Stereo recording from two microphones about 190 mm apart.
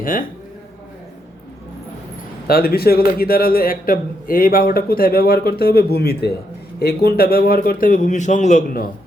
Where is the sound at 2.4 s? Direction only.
55° left (ahead or behind).